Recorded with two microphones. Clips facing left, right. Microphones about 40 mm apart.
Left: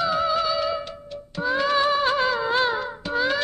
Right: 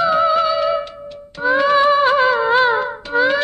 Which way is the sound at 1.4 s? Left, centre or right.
Right.